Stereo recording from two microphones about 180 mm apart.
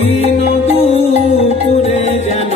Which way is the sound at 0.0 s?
35° left (ahead or behind).